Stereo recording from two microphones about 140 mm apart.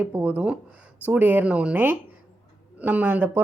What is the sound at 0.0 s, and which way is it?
Speech, 15° right (ahead or behind).